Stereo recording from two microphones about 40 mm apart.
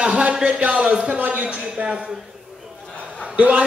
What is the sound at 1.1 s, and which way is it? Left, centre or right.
Speech, right.